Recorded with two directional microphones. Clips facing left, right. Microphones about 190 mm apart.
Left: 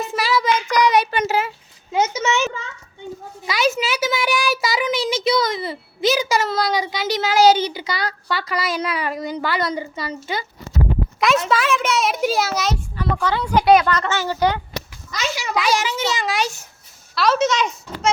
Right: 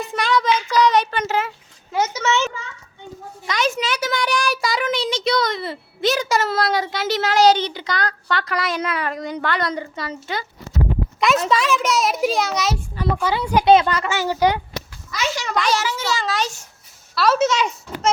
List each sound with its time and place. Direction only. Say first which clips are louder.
0.0 s a sound: even; 5° left (ahead or behind)
1.9 s a child's voice: left 1 dB; 20° left (ahead or behind)
3.4 s a child's voice: left 2 dB; 5° left (ahead or behind)
11.4 s a child's voice: even; centre (ahead or behind)
13.0 s a woman's voice: right 1 dB; 10° right (ahead or behind)
13.7 s a woman's voice: right 1 dB; 25° right (ahead or behind)
13.9 s a woman's voice: even; 10° right (ahead or behind)
15.4 s a child's voice: left 2 dB; 5° left (ahead or behind)
17.2 s a child's voice: even; 5° right (ahead or behind)